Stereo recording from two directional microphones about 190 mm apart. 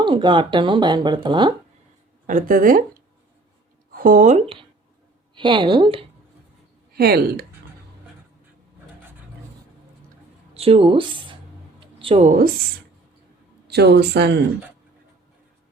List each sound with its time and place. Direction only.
0.0 s speech: 25° right (ahead or behind)
2.2 s speech: 45° right (ahead or behind)
3.9 s speech: 45° right (ahead or behind)
5.3 s speech: 25° right (ahead or behind)
6.9 s speech: 55° right (ahead or behind)
10.5 s speech: 30° right (ahead or behind)
13.7 s speech: 60° right (ahead or behind)